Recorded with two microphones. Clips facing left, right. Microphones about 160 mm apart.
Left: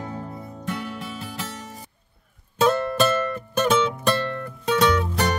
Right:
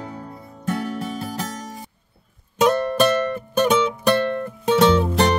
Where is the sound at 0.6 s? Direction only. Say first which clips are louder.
Right 6 dB; 45° right (ahead or behind).